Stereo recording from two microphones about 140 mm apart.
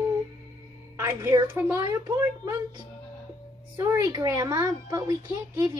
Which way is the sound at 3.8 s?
20° right (ahead or behind).